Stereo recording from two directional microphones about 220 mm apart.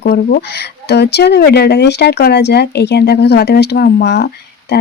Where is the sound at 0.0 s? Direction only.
45° left (ahead or behind).